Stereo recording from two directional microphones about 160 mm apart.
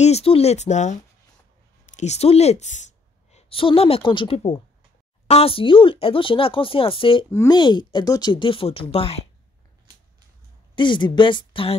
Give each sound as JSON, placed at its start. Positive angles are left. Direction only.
{"t": 0.0, "sound": "a woman's voice", "side_deg": 40}
{"t": 7.2, "sound": "speech", "side_deg": 15}
{"t": 7.5, "sound": "speech", "side_deg": 30}
{"t": 10.8, "sound": "speech", "side_deg": 30}